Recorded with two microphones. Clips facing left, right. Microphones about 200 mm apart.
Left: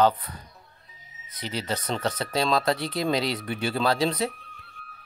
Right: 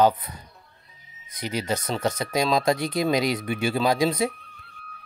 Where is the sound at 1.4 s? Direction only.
15° right (ahead or behind).